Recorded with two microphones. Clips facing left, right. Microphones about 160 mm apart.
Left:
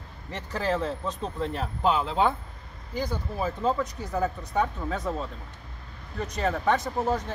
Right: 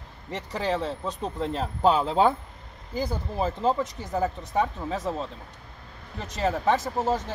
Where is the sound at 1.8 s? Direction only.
40° right (ahead or behind).